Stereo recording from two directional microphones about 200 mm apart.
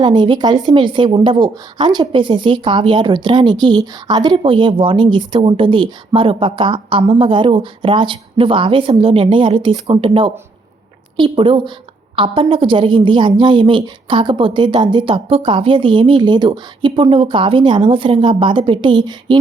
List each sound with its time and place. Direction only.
0.0 s a woman's voice: 25° right (ahead or behind)